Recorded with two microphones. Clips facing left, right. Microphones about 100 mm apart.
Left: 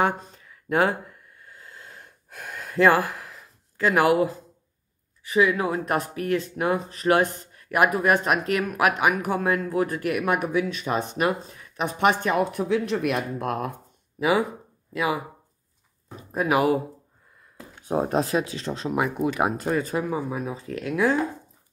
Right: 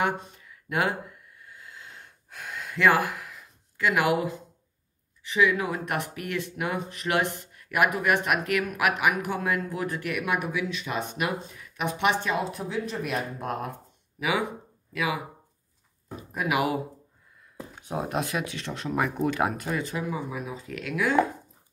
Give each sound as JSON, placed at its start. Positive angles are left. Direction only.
{"t": 0.0, "sound": "speech", "side_deg": 35}
{"t": 1.4, "sound": "a sound", "side_deg": 40}
{"t": 5.3, "sound": "speech", "side_deg": 40}
{"t": 14.9, "sound": "speech", "side_deg": 30}
{"t": 16.2, "sound": "speech", "side_deg": 35}
{"t": 17.8, "sound": "speech", "side_deg": 40}
{"t": 19.5, "sound": "speech", "side_deg": 30}